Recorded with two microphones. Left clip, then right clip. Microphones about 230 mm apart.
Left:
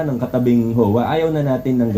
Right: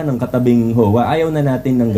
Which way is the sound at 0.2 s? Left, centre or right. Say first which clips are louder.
Right 3 dB; right.